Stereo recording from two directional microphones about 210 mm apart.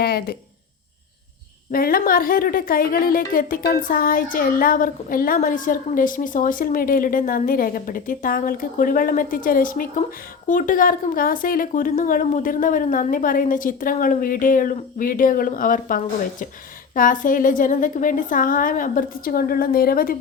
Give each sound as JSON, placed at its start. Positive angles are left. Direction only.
{"t": 0.0, "sound": "a woman's voice", "side_deg": 45}
{"t": 1.7, "sound": "a woman's voice", "side_deg": 45}